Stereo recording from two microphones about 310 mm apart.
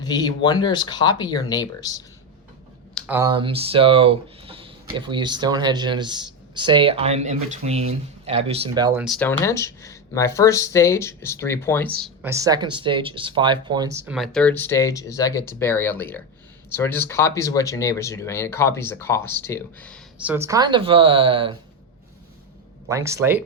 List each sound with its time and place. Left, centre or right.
0.0 s speech: centre
2.9 s speech: centre
9.0 s speech: centre
12.0 s speech: centre
20.3 s speech: centre
22.9 s speech: centre